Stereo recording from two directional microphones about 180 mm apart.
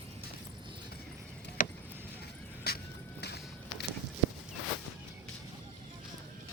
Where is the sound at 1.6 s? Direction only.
50° left (ahead or behind).